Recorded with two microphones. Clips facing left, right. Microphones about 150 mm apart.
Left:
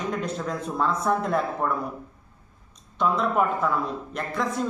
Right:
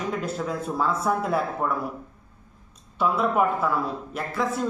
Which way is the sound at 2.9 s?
5° right (ahead or behind).